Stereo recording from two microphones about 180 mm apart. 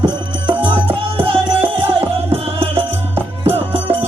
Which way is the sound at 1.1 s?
30° right (ahead or behind).